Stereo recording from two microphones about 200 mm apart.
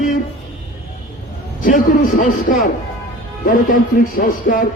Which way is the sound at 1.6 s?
45° left (ahead or behind).